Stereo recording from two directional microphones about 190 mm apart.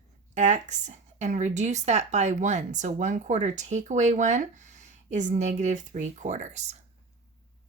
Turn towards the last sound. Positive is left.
turn(degrees=-35)  # may be behind; listen again after turning